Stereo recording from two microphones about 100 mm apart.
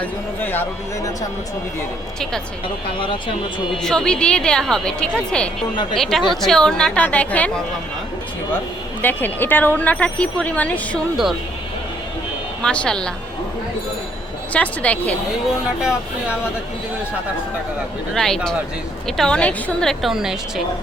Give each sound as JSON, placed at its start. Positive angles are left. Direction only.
{"t": 0.0, "sound": "speech", "side_deg": 20}
{"t": 3.0, "sound": "speech", "side_deg": 60}
{"t": 3.8, "sound": "speech", "side_deg": 5}
{"t": 9.0, "sound": "speech", "side_deg": 20}
{"t": 12.6, "sound": "speech", "side_deg": 10}
{"t": 14.5, "sound": "speech", "side_deg": 15}
{"t": 15.8, "sound": "speech", "side_deg": -5}
{"t": 18.1, "sound": "a woman's voice", "side_deg": 5}